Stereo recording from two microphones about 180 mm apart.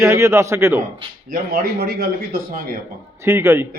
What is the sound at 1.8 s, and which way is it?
Speech, 60° right (ahead or behind).